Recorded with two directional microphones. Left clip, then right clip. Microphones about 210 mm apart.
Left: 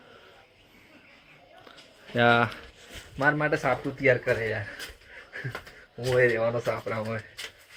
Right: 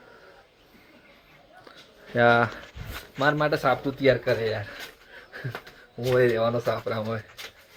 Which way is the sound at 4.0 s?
15° right (ahead or behind).